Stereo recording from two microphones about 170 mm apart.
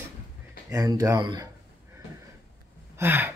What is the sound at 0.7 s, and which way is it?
Speech, 20° right (ahead or behind).